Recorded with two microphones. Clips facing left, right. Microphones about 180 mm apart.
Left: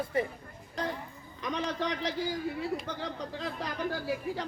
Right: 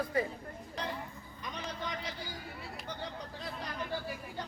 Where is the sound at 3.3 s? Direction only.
90° left.